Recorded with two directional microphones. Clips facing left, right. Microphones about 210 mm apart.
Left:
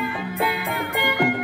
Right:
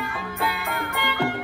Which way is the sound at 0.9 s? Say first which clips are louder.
Left 4 dB; 15° left (ahead or behind).